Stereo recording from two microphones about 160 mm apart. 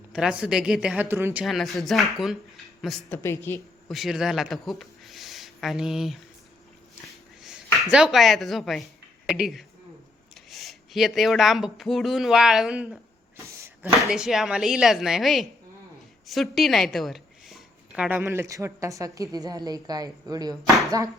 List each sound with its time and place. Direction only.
0.1 s speech: 5° right (ahead or behind)
3.1 s speech: 15° left (ahead or behind)
3.9 s speech: centre (ahead or behind)
7.4 s a woman's voice: 5° right (ahead or behind); by 20.6 s 25° right (ahead or behind)